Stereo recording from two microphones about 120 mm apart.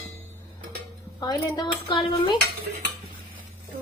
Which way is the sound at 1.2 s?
35° left (ahead or behind).